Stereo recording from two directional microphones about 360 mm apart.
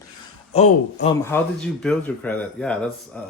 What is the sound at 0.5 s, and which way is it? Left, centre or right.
A man's voice, centre.